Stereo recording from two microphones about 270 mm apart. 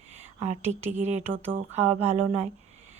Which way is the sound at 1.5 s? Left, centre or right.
Right.